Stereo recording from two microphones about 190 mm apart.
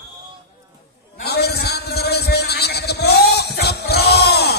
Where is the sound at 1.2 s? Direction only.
60° left (ahead or behind).